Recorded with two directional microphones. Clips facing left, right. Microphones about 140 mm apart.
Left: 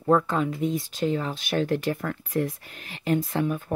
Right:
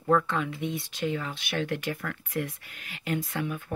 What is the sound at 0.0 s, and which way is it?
Speech, 35° left (ahead or behind).